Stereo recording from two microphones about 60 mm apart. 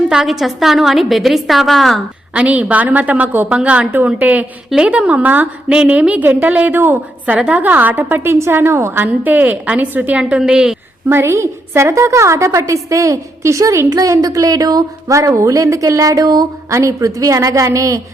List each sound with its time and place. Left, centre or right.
0.1 s a woman's voice: centre
2.3 s a woman's voice: right
5.6 s a woman's voice: centre; by 9.0 s right
9.0 s a woman's voice: right
10.2 s a woman's voice: centre
11.1 s a woman's voice: right